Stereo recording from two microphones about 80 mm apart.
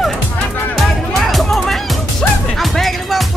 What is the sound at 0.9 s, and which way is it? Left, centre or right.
Music, centre.